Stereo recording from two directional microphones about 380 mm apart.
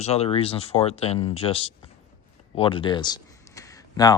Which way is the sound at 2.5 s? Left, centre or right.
Centre.